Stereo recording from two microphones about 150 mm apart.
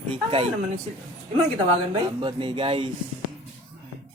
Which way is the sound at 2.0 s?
30° right (ahead or behind).